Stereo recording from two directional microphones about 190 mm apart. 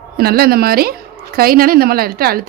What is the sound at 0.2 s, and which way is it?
Speech, 55° right (ahead or behind).